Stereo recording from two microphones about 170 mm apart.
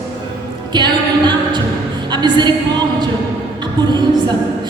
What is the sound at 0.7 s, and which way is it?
Speech, 25° right (ahead or behind).